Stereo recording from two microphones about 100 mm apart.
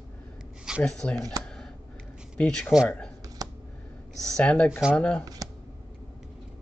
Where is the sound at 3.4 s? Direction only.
40° right (ahead or behind).